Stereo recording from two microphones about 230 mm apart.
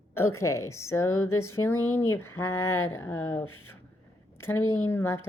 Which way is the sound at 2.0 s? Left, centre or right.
Centre.